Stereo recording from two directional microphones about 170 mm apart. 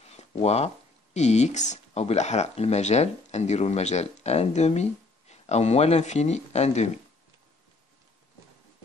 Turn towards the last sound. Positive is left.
turn(degrees=40)  # may be behind; listen again after turning